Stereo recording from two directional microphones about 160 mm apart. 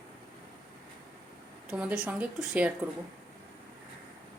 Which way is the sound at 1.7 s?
5° right (ahead or behind).